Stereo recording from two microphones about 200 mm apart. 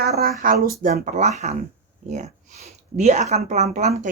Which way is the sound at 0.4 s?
40° right (ahead or behind).